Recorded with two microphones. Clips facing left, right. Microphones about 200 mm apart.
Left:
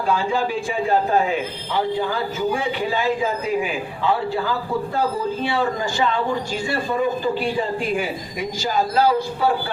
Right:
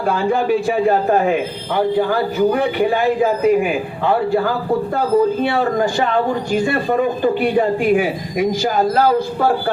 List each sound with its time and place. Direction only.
0.0 s a man's voice: 55° right (ahead or behind)